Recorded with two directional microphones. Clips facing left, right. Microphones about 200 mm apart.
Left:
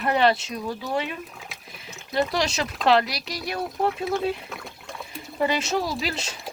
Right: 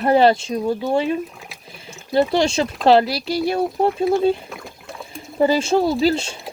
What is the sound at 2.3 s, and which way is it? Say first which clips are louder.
Speech: right 7 dB; 30° right (ahead or behind).